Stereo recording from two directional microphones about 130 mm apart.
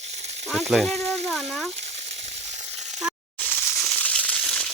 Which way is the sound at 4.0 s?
10° left (ahead or behind).